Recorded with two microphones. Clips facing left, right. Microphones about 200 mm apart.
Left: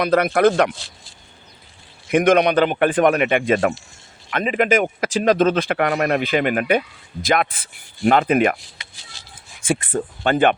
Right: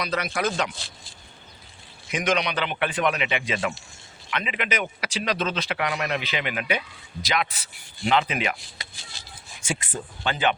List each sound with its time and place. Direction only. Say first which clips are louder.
0.0 s speech: left 11 dB; 55° left (ahead or behind)
2.0 s speech: left 10 dB; 55° left (ahead or behind)
8.8 s chopping: right 2 dB; 35° right (ahead or behind)
9.6 s speech: left 10 dB; 55° left (ahead or behind)